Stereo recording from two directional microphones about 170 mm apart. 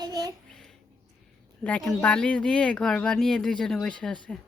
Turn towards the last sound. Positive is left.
turn(degrees=5)  # may be behind; listen again after turning